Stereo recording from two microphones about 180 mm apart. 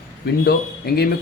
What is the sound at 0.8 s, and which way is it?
Speech, 60° left (ahead or behind).